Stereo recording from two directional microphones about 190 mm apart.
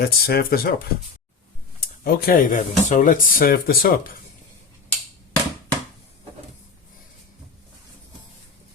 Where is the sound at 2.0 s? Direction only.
50° left (ahead or behind).